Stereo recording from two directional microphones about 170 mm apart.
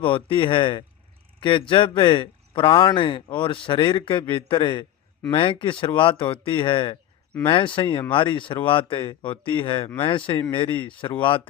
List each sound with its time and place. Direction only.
0.0 s speech: 30° left (ahead or behind)